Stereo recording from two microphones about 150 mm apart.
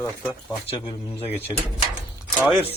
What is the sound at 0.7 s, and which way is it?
Speech, 35° left (ahead or behind).